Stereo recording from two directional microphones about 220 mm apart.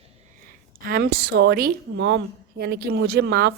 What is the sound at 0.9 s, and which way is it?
A woman's voice, 45° right (ahead or behind).